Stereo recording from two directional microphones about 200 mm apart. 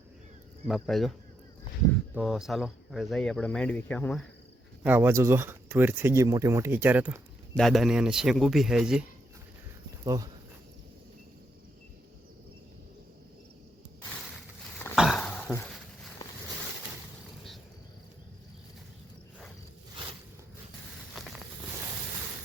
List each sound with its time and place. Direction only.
0.6 s speech: centre (ahead or behind)
2.1 s speech: centre (ahead or behind)
4.8 s speech: 10° right (ahead or behind)
10.0 s speech: 20° right (ahead or behind)
14.9 s dog: centre (ahead or behind)
21.2 s walk: centre (ahead or behind)